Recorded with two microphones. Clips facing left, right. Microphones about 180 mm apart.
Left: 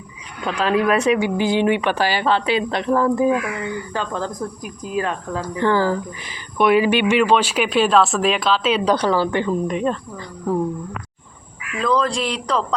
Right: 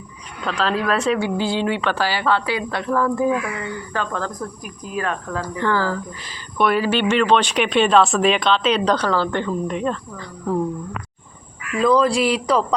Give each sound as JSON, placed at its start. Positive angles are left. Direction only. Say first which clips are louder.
{"t": 0.4, "sound": "speech", "louder": "left 3 dB", "side_deg": 15}
{"t": 11.8, "sound": "speech", "louder": "right 4 dB", "side_deg": -5}